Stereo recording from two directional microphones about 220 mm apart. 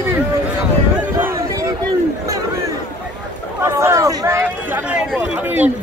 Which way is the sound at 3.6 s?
10° right (ahead or behind).